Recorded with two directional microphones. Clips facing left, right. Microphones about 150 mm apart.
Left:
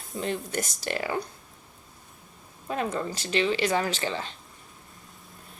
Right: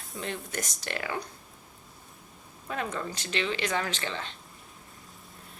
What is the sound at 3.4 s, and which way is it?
Speech, 30° left (ahead or behind).